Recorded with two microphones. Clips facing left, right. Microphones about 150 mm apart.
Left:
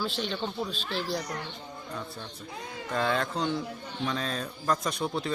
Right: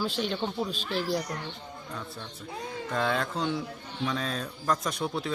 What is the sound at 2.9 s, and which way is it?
A woman's voice, centre (ahead or behind).